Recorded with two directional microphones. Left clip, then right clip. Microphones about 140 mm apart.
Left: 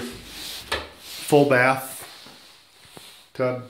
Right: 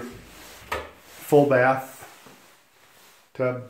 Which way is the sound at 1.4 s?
20° left (ahead or behind).